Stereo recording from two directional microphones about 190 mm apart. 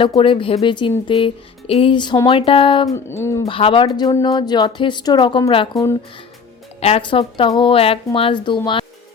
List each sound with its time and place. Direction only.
0.0 s speech: 25° left (ahead or behind)
3.1 s speech: 15° left (ahead or behind)
3.4 s speech: 25° left (ahead or behind)